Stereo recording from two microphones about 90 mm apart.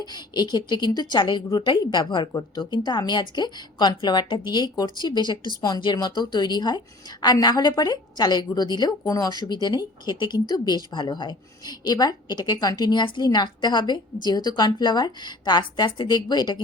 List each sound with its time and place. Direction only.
0.0 s a woman's voice: 50° left (ahead or behind)